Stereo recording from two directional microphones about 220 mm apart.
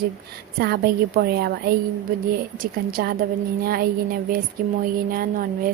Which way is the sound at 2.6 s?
40° right (ahead or behind).